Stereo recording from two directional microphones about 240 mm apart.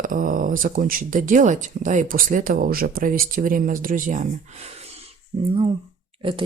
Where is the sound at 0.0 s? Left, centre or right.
Right.